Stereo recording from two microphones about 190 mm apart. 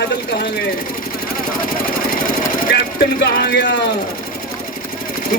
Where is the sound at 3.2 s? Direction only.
60° left (ahead or behind).